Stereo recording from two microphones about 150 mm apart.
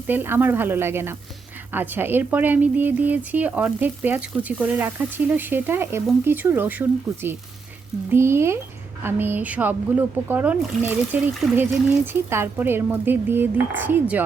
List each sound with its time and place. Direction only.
0.1 s speech: 15° right (ahead or behind)
11.4 s speech: centre (ahead or behind)
12.1 s speech: 15° right (ahead or behind)